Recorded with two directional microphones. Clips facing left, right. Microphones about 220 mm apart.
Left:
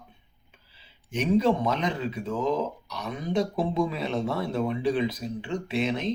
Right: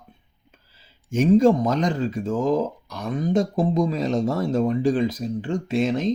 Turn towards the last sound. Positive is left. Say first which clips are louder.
# right 5 dB
turn(degrees=-45)  # may be behind; listen again after turning